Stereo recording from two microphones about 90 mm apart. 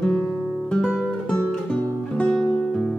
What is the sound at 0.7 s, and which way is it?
Music, 10° left (ahead or behind).